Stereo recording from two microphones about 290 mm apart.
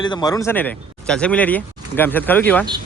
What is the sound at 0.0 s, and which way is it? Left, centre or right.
Speech, centre.